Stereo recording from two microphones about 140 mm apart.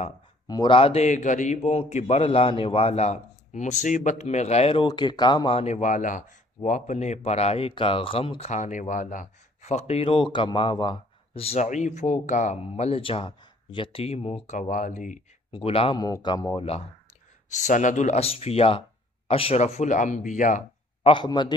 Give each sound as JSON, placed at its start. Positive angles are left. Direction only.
{"t": 0.5, "sound": "speech", "side_deg": 35}
{"t": 4.8, "sound": "speech", "side_deg": 30}
{"t": 15.5, "sound": "a man's voice", "side_deg": 40}
{"t": 16.0, "sound": "speech", "side_deg": 30}
{"t": 17.5, "sound": "speech", "side_deg": 60}
{"t": 21.0, "sound": "a man's voice", "side_deg": 35}